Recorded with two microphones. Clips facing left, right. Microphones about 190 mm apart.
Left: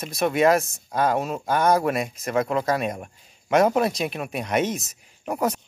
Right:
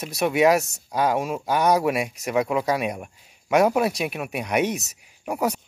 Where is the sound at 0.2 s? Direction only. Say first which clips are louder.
Even; 10° right (ahead or behind).